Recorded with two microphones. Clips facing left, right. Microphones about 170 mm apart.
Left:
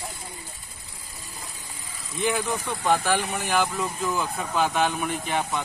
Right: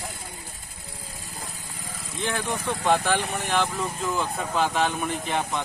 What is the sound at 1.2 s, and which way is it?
Vehicle, 45° right (ahead or behind).